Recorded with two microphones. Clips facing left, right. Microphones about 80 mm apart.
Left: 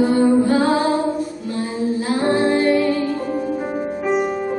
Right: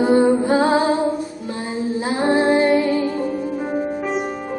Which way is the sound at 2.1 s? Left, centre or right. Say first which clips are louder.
Right 2 dB; right.